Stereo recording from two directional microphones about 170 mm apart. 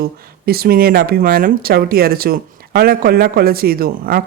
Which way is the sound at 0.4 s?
60° right (ahead or behind).